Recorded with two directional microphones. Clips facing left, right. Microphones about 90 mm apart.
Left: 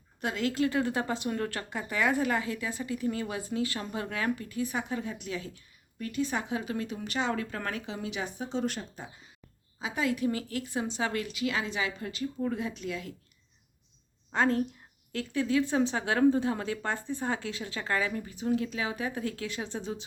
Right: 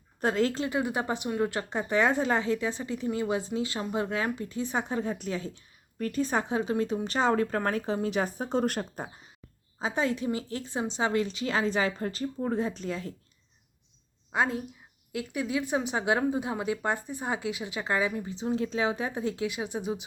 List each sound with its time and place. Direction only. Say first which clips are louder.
0.2 s speech: right 5 dB; 35° right (ahead or behind)
0.6 s speech: left 1 dB; 15° right (ahead or behind); by 9.0 s 50° right (ahead or behind)
9.7 s speech: right 2 dB; 35° right (ahead or behind)
14.3 s speech: left 2 dB; 10° right (ahead or behind)